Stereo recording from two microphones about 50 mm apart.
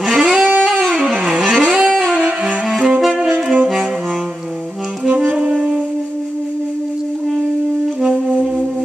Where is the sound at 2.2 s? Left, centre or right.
Right.